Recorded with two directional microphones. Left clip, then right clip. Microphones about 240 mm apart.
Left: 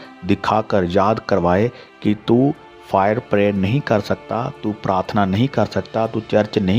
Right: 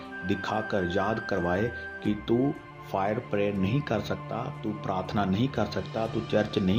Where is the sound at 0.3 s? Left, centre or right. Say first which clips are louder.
Left 12 dB; left.